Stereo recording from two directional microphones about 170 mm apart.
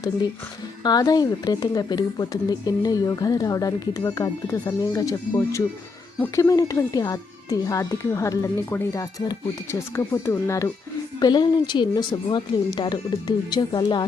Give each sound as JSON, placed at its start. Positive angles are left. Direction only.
{"t": 0.9, "sound": "speech", "side_deg": 20}